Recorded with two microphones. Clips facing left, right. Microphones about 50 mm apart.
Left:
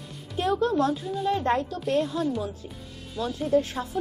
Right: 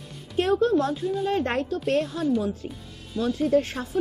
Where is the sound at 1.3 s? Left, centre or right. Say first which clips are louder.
Left 4 dB; right.